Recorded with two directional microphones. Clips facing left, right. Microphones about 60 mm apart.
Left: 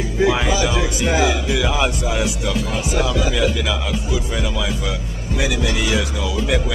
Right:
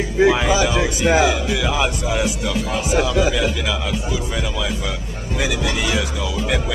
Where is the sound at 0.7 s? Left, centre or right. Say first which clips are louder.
Right 3 dB; centre.